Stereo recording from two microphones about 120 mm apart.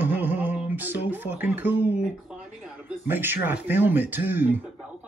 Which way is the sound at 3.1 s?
15° right (ahead or behind).